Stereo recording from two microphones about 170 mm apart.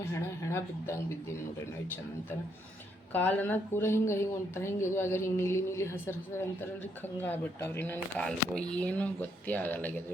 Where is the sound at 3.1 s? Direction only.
10° left (ahead or behind).